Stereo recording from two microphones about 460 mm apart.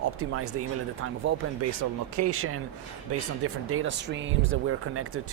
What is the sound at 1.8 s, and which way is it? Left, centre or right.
Speech, right.